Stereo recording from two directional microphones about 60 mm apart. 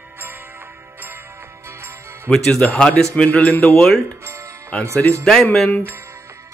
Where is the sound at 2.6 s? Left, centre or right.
Centre.